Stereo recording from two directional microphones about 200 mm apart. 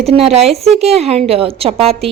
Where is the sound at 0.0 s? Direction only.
30° right (ahead or behind).